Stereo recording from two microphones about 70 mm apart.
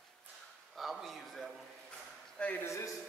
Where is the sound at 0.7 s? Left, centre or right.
Centre.